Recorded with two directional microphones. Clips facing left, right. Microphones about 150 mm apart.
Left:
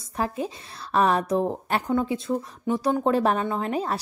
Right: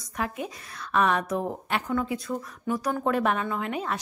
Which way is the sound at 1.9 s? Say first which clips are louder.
Left 5 dB; 25° left (ahead or behind).